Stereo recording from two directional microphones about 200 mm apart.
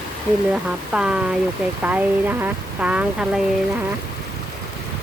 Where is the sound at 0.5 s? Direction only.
5° right (ahead or behind).